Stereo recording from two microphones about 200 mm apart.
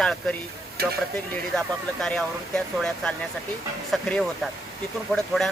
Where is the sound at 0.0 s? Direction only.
5° left (ahead or behind).